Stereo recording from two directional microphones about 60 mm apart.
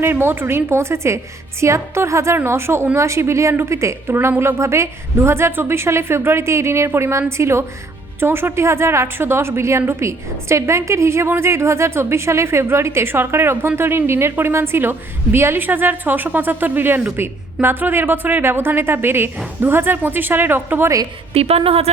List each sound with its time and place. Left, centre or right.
0.0 s a woman's voice: right